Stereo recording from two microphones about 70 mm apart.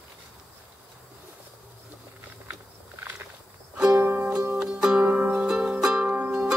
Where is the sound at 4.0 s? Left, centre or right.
Right.